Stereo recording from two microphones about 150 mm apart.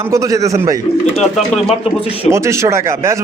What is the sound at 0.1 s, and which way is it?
Speech, 20° right (ahead or behind).